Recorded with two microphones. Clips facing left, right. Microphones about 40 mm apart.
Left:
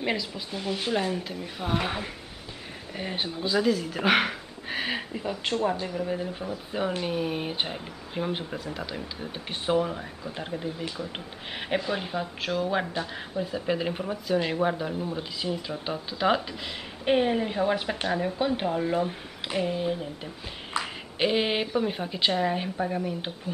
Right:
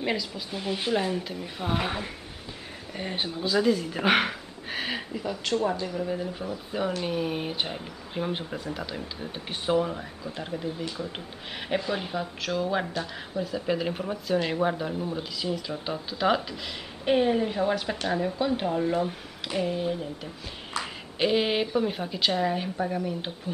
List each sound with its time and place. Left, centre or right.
0.0 s speech: centre
0.6 s speech: centre
5.1 s speech: centre